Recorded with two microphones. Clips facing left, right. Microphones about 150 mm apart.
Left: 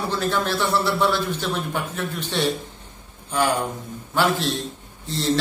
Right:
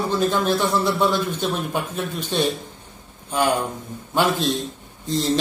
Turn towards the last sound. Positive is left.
turn(degrees=-15)  # may be behind; listen again after turning